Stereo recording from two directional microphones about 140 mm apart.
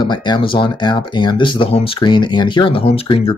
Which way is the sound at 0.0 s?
30° left (ahead or behind).